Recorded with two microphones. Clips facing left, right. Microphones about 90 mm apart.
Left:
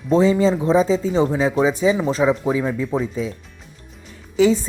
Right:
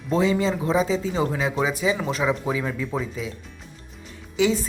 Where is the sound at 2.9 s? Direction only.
35° left (ahead or behind).